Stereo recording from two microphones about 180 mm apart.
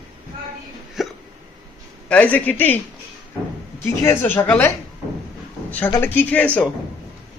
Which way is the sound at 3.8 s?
15° left (ahead or behind).